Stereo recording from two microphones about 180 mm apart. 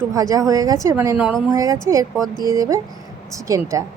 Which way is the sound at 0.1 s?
20° right (ahead or behind).